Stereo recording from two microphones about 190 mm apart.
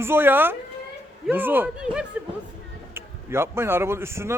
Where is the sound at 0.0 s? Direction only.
10° right (ahead or behind).